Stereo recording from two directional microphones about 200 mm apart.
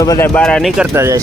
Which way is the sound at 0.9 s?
15° right (ahead or behind).